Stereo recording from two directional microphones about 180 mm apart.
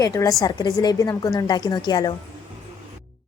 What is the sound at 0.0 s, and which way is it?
A woman's voice, 20° left (ahead or behind).